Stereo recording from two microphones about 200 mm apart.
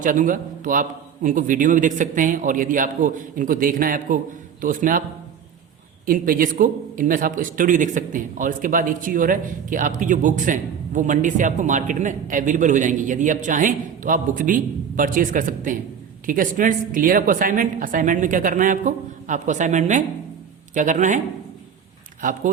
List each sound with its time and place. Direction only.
0.0 s a man's voice: 40° right (ahead or behind)
6.1 s speech: 45° right (ahead or behind)
22.2 s speech: 40° right (ahead or behind)